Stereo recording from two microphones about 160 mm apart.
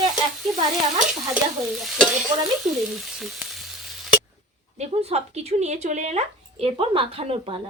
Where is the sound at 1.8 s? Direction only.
Centre (ahead or behind).